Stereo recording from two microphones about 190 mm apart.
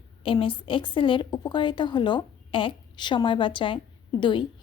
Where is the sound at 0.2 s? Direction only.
25° left (ahead or behind).